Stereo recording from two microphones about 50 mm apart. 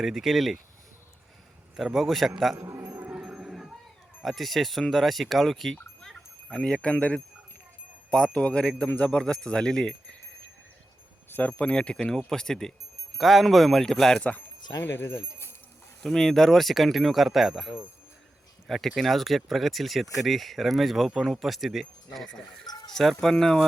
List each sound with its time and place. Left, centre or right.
0.0 s speech: centre
1.7 s speech: centre
3.1 s music: centre
4.2 s speech: centre
6.1 s a sound: centre
6.9 s speech: left
8.4 s speech: centre
11.3 s speech: left; by 14.2 s centre
14.2 s speech: left
14.8 s speech: left
16.0 s speech: centre